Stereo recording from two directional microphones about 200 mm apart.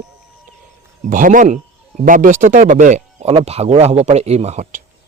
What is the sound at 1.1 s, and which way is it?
Speech, 40° right (ahead or behind).